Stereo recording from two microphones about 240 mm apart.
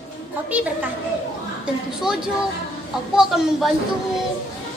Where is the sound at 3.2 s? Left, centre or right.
Centre.